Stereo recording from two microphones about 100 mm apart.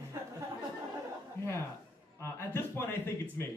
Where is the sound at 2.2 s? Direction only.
25° left (ahead or behind).